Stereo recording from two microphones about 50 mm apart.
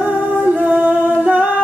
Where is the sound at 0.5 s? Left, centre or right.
Right.